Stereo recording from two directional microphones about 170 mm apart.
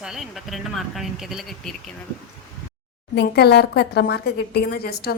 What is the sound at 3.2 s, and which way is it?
A woman's voice, 75° left (ahead or behind).